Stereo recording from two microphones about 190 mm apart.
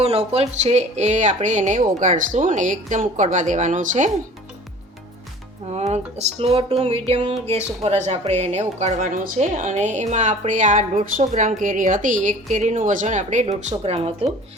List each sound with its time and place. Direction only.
0.0 s a woman's voice: 35° right (ahead or behind)
5.7 s a woman's voice: 35° right (ahead or behind)